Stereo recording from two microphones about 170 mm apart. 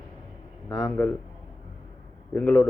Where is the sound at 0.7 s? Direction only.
15° left (ahead or behind).